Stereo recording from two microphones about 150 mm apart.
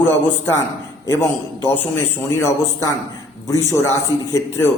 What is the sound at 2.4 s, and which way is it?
Speech, 20° left (ahead or behind).